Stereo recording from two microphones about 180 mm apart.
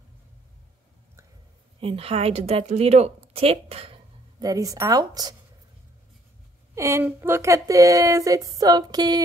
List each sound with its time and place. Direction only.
1.8 s a woman's voice: 30° right (ahead or behind)
4.4 s a woman's voice: 20° right (ahead or behind)
6.7 s speech: 15° right (ahead or behind)